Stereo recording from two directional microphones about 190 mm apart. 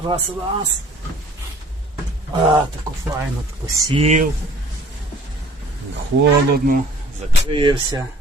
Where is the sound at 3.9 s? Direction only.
30° right (ahead or behind).